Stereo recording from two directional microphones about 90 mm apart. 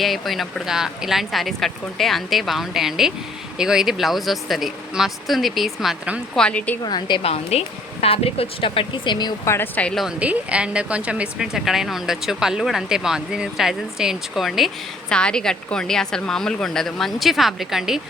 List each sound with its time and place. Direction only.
0.0 s speech: centre (ahead or behind)
6.3 s a woman's voice: 10° left (ahead or behind)
6.8 s speech: 55° left (ahead or behind)
8.0 s speech: 90° left; by 9.3 s 55° left (ahead or behind)
9.4 s speech: 30° left (ahead or behind)
9.9 s speech: centre (ahead or behind)
10.2 s speech: 15° right (ahead or behind)
15.1 s speech: 10° left (ahead or behind)